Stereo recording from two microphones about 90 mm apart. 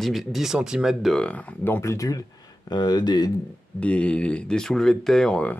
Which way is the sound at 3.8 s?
15° left (ahead or behind).